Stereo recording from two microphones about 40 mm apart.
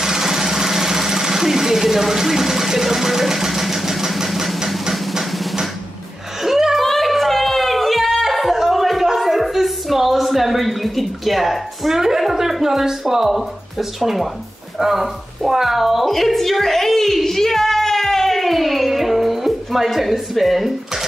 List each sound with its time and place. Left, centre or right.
0.0 s engine: centre
5.1 s drum: centre
6.4 s a sound: centre
6.8 s a sound: centre
12.0 s a woman's voice: centre
14.8 s music: centre